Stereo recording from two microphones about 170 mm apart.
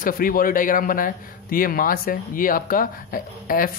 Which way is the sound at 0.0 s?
55° left (ahead or behind).